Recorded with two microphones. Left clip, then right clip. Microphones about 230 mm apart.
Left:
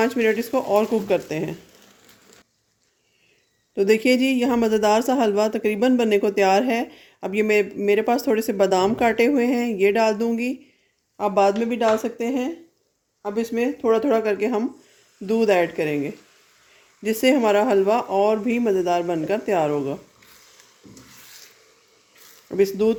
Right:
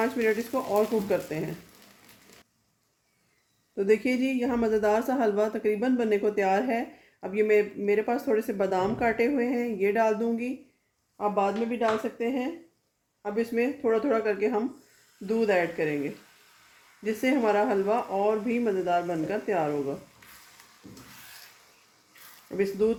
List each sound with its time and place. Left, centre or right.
0.0 s speech: left
3.8 s speech: left
22.4 s speech: left